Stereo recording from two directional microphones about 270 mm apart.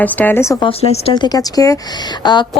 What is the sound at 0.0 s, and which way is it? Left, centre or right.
Speech, centre.